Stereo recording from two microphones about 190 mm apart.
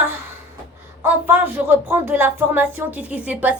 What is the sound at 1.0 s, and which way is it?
Speech, 10° right (ahead or behind).